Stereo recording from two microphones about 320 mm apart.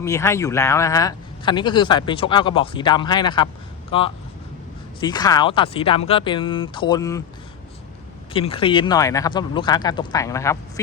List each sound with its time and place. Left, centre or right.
0.0 s speech: centre
8.3 s speech: centre